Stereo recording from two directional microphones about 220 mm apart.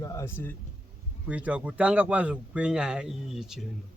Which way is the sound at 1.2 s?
5° right (ahead or behind).